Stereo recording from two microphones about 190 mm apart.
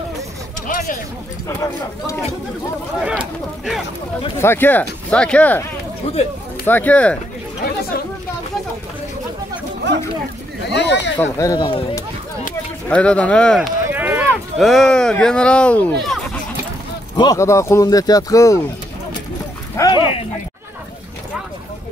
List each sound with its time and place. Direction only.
0.7 s a sound: 45° left (ahead or behind)
3.0 s speech: 5° right (ahead or behind)
4.4 s speech: 10° left (ahead or behind)
6.0 s speech: 35° left (ahead or behind)
6.6 s speech: 10° left (ahead or behind)
10.7 s a sound: 65° left (ahead or behind)
11.1 s speech: 15° left (ahead or behind)
12.8 s speech: 5° left (ahead or behind)
13.8 s run: 10° right (ahead or behind)
14.6 s speech: centre (ahead or behind)
17.2 s speech: 15° left (ahead or behind)
19.8 s dog: 25° left (ahead or behind)